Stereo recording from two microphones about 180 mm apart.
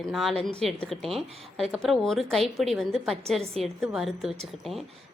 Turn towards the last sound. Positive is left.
turn(degrees=0)  # may be behind; listen again after turning